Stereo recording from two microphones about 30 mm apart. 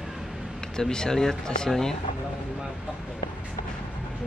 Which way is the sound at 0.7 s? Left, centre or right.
Left.